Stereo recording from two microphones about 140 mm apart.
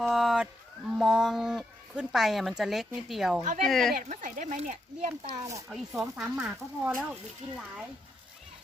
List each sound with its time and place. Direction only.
0.0 s a sound: centre (ahead or behind)
0.9 s speech: centre (ahead or behind)
3.9 s speech: 60° right (ahead or behind)
5.3 s speech: 25° right (ahead or behind)
5.6 s speech: 5° right (ahead or behind)